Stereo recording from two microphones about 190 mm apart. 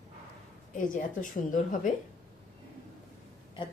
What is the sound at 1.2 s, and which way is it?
Speech, 45° left (ahead or behind).